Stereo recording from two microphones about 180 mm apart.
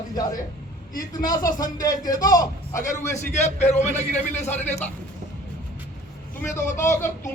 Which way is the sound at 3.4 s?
40° left (ahead or behind).